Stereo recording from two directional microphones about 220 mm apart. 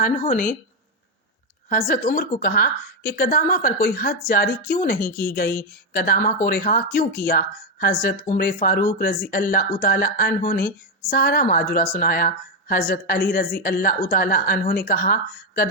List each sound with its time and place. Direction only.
0.0 s a woman's voice: 35° left (ahead or behind)
1.7 s a woman's voice: 35° left (ahead or behind)